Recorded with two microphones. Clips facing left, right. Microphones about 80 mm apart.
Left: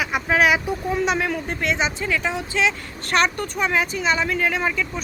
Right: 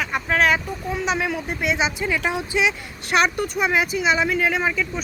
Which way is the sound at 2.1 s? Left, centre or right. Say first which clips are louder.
Right 1 dB; centre.